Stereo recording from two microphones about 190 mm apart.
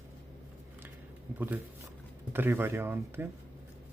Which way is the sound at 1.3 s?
10° right (ahead or behind).